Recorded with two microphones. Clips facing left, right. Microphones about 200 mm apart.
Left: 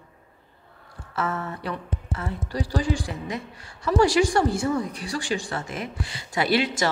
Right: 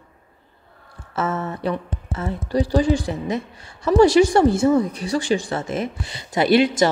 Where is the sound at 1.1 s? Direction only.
25° right (ahead or behind).